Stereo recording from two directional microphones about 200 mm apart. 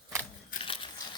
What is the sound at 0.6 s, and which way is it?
Biting, 25° left (ahead or behind).